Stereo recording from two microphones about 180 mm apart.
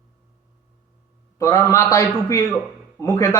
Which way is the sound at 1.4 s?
15° left (ahead or behind).